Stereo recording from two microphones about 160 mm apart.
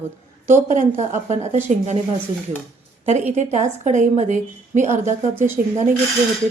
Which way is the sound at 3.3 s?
45° right (ahead or behind).